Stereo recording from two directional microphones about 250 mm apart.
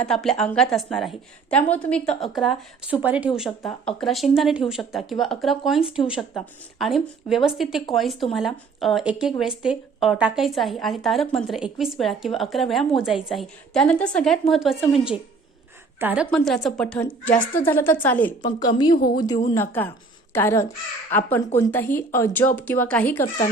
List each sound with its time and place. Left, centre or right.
0.0 s a woman's voice: centre
5.8 s speech: left
6.1 s a woman's voice: centre